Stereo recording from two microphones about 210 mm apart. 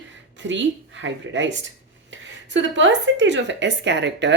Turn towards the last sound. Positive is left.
turn(degrees=-55)  # may be behind; listen again after turning